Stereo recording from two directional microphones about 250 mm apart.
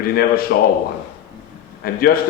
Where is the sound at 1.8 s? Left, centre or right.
Left.